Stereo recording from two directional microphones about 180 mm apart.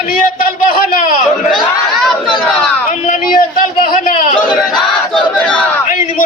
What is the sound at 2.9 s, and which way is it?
Speech, 45° left (ahead or behind).